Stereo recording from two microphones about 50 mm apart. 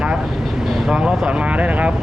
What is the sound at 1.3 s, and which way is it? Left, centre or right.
Speech, right.